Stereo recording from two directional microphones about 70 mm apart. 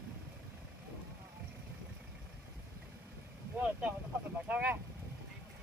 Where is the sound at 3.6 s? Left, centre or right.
Centre.